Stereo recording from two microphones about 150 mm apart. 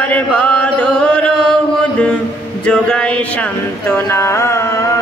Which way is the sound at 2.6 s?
5° left (ahead or behind).